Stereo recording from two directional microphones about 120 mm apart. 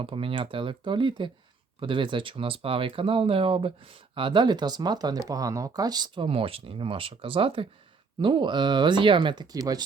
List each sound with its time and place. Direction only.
0.0 s speech: 50° right (ahead or behind); by 9.8 s 30° right (ahead or behind)